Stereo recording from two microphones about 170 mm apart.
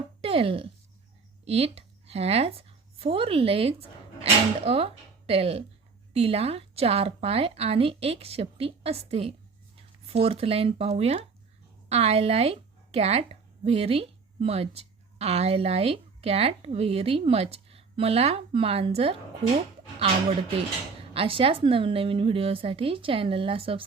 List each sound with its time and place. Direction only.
0.2 s a woman's voice: 35° right (ahead or behind)
21.1 s speech: 35° right (ahead or behind)